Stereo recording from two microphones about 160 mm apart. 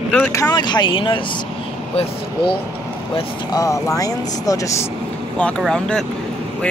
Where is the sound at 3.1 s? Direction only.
25° left (ahead or behind).